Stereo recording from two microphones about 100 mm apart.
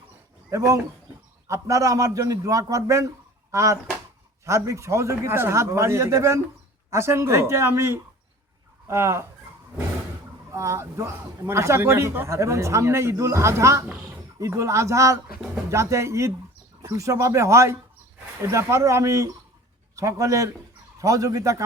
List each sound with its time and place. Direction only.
0.5 s a man's voice: 35° right (ahead or behind)
10.5 s a man's voice: 30° right (ahead or behind)